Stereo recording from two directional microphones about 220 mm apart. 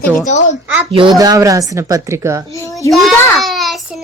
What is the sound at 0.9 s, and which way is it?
A woman's voice, 25° right (ahead or behind).